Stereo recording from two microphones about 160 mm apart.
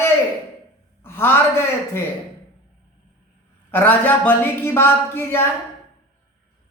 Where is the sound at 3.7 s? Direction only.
15° left (ahead or behind).